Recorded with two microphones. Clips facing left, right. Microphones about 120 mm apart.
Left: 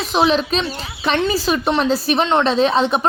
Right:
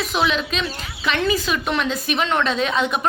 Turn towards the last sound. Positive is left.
turn(degrees=30)  # may be behind; listen again after turning